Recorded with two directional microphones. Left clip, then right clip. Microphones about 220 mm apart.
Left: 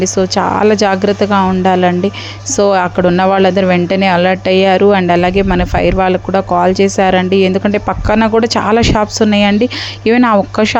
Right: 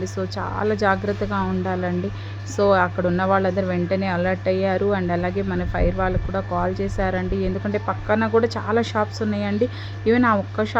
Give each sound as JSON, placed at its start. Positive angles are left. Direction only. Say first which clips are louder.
{"t": 0.0, "sound": "speech", "louder": "left 15 dB", "side_deg": 35}